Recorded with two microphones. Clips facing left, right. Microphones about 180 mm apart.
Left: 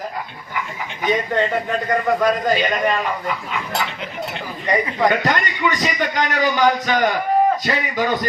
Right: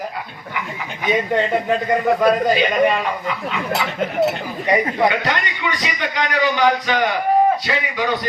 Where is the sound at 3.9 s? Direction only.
45° right (ahead or behind).